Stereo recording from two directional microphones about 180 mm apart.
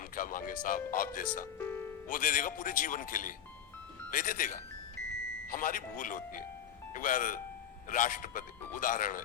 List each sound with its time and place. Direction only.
0.2 s speech: 50° left (ahead or behind)
1.5 s music: 10° left (ahead or behind)
2.0 s speech: 50° left (ahead or behind)